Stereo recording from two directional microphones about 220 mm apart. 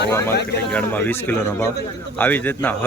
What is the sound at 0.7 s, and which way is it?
A man's voice, 10° left (ahead or behind).